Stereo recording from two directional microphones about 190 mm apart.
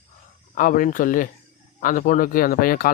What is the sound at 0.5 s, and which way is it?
Speech, 45° left (ahead or behind).